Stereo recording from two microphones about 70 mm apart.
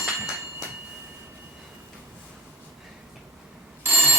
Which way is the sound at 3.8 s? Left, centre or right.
Right.